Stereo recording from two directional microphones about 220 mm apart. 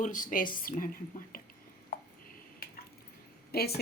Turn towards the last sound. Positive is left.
turn(degrees=45)  # may be behind; listen again after turning